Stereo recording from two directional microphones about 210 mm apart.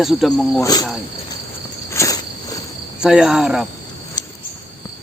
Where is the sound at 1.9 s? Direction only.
15° left (ahead or behind).